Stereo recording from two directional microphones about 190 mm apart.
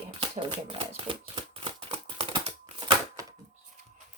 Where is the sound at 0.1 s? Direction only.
30° right (ahead or behind).